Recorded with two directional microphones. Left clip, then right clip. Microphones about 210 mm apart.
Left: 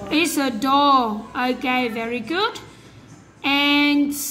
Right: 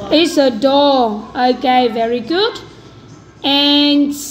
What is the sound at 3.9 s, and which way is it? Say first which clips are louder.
Speech: right 6 dB; 45° left (ahead or behind).